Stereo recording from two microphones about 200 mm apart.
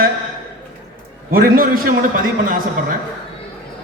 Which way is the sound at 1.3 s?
45° right (ahead or behind).